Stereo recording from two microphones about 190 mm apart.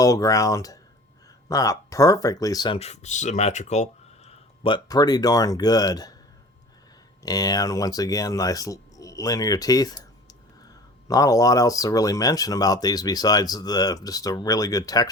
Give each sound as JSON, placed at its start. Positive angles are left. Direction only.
{"t": 0.0, "sound": "speech", "side_deg": 15}
{"t": 2.7, "sound": "speech", "side_deg": 35}
{"t": 4.3, "sound": "speech", "side_deg": 25}
{"t": 7.2, "sound": "speech", "side_deg": 20}
{"t": 11.1, "sound": "speech", "side_deg": 20}